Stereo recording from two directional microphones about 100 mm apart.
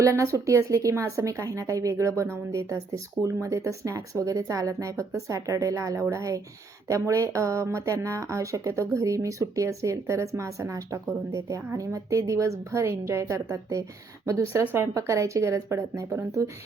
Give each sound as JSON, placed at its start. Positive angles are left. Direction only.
{"t": 0.0, "sound": "a woman's voice", "side_deg": -30}